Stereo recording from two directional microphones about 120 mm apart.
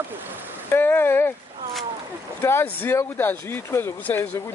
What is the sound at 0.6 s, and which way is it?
Speech, 15° left (ahead or behind).